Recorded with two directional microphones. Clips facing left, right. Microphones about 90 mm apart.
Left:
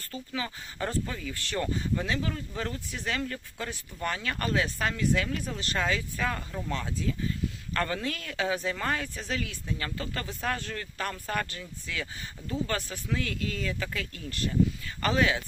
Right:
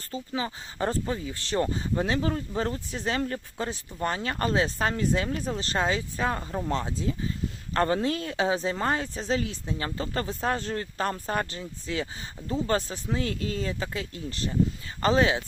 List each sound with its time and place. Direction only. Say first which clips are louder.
0.1 s speech: right 4 dB; 25° right (ahead or behind)